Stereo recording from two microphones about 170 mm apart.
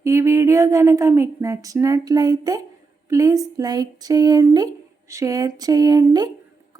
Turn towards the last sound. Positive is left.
turn(degrees=-20)  # may be behind; listen again after turning